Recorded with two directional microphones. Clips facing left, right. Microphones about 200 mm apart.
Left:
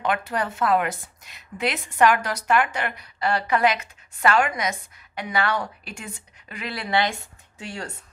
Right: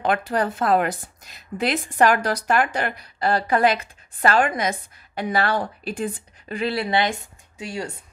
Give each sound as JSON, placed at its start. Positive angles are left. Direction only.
{"t": 0.0, "sound": "a woman's voice", "side_deg": -35}